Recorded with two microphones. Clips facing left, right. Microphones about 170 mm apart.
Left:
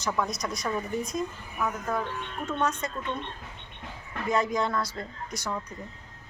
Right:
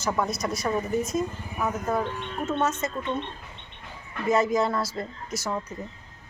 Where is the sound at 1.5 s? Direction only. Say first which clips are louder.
Right 3 dB; 20° right (ahead or behind).